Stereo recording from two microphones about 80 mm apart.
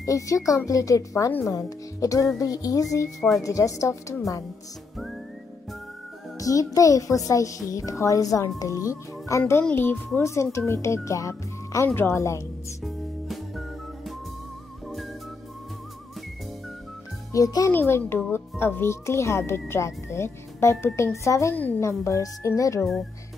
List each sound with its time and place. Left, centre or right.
0.0 s a child's voice: left
3.2 s a woman's voice: centre
3.4 s a child's voice: left
6.3 s a child's voice: left
9.8 s speech: left
10.2 s a child's voice: left
11.9 s speech: left
12.2 s speech: left
12.8 s music: centre
17.3 s a child's voice: left
17.6 s a child's voice: left